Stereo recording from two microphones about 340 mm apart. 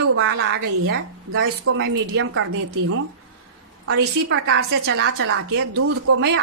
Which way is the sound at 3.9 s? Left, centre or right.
Right.